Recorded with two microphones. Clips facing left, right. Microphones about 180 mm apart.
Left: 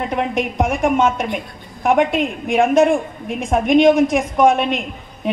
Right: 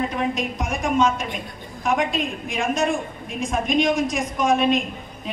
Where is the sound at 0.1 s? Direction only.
60° left (ahead or behind).